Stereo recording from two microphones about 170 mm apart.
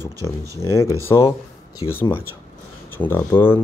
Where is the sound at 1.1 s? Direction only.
20° left (ahead or behind).